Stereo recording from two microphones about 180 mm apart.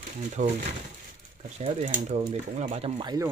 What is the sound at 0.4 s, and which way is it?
Speech, 40° right (ahead or behind).